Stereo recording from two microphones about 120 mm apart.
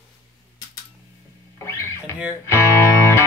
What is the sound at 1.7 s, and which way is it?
Speech, 25° left (ahead or behind).